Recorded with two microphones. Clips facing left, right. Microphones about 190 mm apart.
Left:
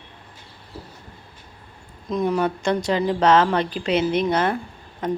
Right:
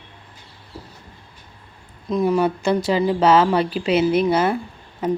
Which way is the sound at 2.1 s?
Centre (ahead or behind).